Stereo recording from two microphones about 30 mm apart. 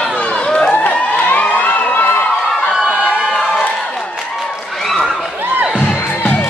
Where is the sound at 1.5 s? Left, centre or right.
Left.